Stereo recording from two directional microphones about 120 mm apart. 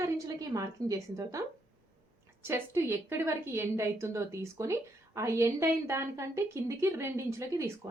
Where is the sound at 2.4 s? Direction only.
20° right (ahead or behind).